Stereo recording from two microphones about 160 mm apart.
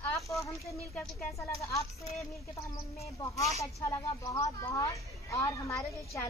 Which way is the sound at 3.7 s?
20° left (ahead or behind).